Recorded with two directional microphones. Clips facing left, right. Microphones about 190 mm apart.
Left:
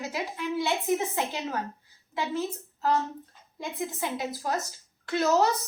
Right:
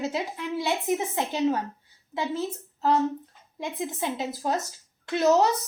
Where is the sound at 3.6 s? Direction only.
20° right (ahead or behind).